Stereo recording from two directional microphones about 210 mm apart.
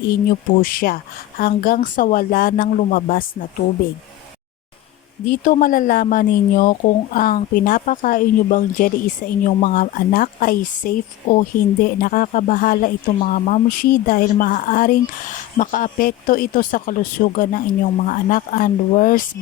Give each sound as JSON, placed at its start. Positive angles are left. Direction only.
{"t": 0.6, "sound": "speech", "side_deg": 45}
{"t": 5.3, "sound": "speech", "side_deg": 40}